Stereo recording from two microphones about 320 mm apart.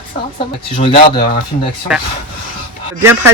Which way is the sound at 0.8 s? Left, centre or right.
Centre.